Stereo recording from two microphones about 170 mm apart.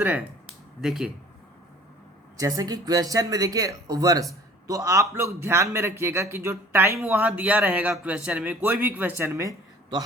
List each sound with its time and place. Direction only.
0.0 s speech: 10° right (ahead or behind)
2.4 s speech: 20° right (ahead or behind)